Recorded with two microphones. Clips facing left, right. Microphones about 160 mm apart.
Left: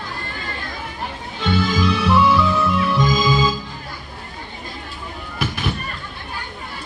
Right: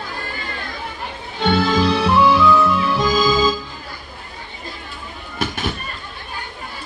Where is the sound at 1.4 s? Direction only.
65° right (ahead or behind).